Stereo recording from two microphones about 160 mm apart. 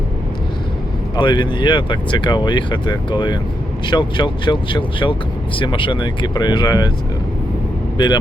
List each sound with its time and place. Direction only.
1.1 s speech: 30° left (ahead or behind)
7.9 s speech: 25° left (ahead or behind)